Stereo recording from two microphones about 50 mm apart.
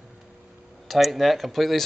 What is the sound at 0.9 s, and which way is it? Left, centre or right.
Speech, centre.